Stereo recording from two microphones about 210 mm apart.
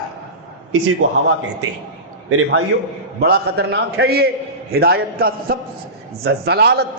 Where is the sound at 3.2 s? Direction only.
50° right (ahead or behind).